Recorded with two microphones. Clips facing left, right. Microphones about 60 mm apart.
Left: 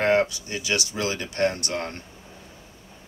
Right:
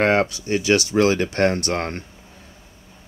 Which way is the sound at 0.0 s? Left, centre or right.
Right.